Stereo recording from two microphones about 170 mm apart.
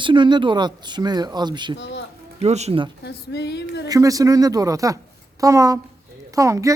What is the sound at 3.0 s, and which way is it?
Speech, 80° left.